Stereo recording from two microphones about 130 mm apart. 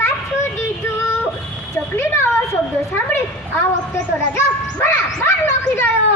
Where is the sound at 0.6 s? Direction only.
20° left (ahead or behind).